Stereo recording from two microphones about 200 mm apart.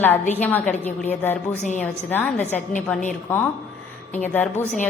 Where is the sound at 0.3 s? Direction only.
10° left (ahead or behind).